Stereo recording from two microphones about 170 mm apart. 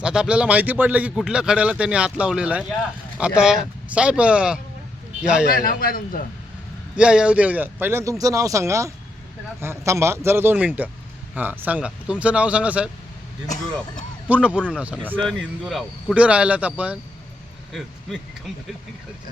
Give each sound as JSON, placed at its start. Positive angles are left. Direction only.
{"t": 0.0, "sound": "speech", "side_deg": -5}
{"t": 5.5, "sound": "a man's voice", "side_deg": 60}
{"t": 6.9, "sound": "speech", "side_deg": -5}
{"t": 14.3, "sound": "speech", "side_deg": -10}